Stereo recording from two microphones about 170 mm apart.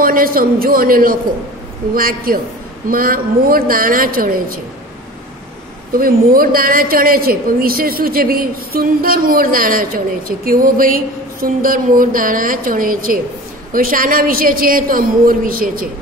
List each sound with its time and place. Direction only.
0.0 s a woman's voice: 60° right (ahead or behind)
5.9 s a woman's voice: 60° right (ahead or behind)